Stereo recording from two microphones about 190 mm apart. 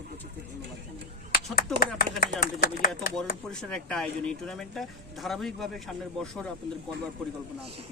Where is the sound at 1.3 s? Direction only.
50° left (ahead or behind).